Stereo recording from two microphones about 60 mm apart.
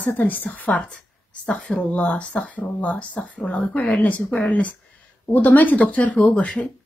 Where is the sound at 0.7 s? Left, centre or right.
Centre.